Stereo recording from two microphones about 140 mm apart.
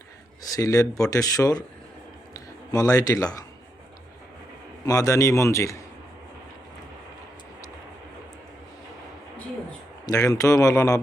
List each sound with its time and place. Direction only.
0.5 s a man's voice: 25° left (ahead or behind)
2.7 s a man's voice: 25° left (ahead or behind)
4.9 s a man's voice: 25° left (ahead or behind)
10.1 s a man's voice: 25° left (ahead or behind)